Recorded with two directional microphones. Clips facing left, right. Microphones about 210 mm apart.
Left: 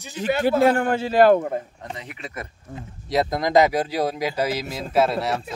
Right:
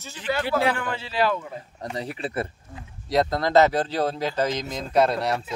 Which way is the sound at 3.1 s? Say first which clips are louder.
Left 1 dB; 10° left (ahead or behind).